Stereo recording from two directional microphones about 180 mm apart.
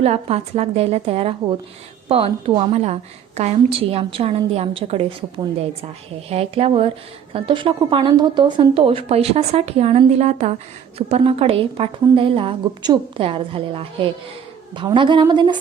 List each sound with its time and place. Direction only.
0.0 s a woman's voice: 35° right (ahead or behind)
6.2 s a woman's voice: 35° right (ahead or behind)